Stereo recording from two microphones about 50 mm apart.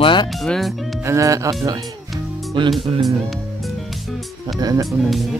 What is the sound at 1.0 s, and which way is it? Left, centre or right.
Speech, right.